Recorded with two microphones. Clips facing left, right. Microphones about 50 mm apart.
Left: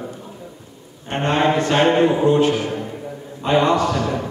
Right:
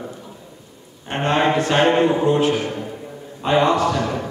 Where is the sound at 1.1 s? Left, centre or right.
Right.